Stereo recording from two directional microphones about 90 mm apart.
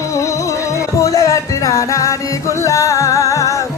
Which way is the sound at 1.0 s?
40° left (ahead or behind).